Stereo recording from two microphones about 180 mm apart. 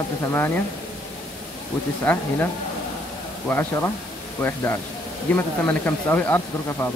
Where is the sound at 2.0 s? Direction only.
10° left (ahead or behind).